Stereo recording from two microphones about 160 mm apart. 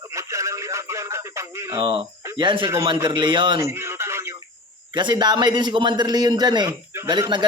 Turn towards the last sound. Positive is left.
turn(degrees=-25)  # may be behind; listen again after turning